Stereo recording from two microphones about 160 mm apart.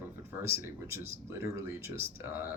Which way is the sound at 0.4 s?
15° right (ahead or behind).